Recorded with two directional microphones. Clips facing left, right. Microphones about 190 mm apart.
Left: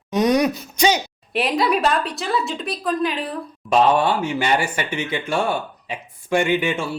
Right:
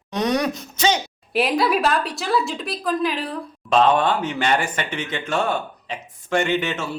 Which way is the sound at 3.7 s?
10° left (ahead or behind).